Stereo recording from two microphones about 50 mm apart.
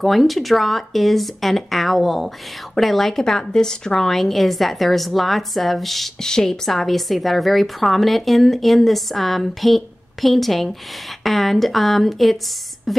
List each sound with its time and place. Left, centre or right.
0.0 s speech: centre
6.2 s speech: centre
12.9 s a sound: centre